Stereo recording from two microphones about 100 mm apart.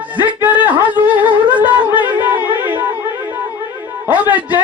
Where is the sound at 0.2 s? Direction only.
15° right (ahead or behind).